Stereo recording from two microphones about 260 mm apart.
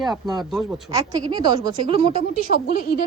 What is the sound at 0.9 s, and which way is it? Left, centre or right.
A woman's voice, centre.